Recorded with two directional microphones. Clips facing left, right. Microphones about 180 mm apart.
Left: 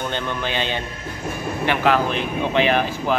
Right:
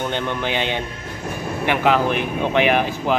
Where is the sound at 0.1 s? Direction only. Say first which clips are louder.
Right 2 dB; 15° right (ahead or behind).